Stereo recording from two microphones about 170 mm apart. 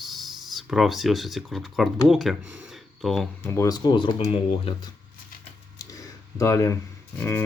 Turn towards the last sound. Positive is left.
turn(degrees=15)  # may be behind; listen again after turning